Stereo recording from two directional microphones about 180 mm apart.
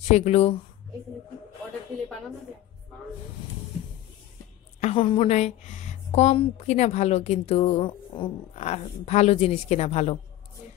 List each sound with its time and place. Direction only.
0.1 s a woman's voice: 35° left (ahead or behind)
4.7 s a woman's voice: 35° left (ahead or behind)